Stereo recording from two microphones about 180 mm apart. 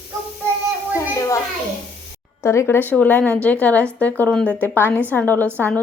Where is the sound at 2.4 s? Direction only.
15° left (ahead or behind).